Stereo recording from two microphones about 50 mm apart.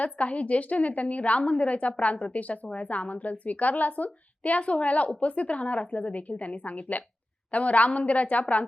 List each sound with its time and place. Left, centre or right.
0.0 s a woman's voice: left